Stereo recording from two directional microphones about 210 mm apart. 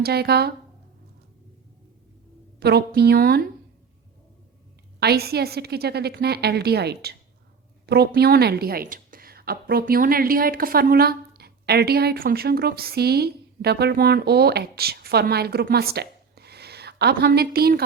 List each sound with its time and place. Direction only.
0.0 s a woman's voice: 50° right (ahead or behind)
2.6 s a woman's voice: 50° right (ahead or behind)
4.9 s a woman's voice: 50° right (ahead or behind)